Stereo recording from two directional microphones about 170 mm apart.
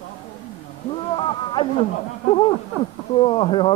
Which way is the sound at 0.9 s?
30° left (ahead or behind).